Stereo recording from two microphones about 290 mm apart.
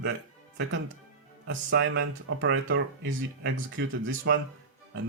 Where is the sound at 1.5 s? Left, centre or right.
Right.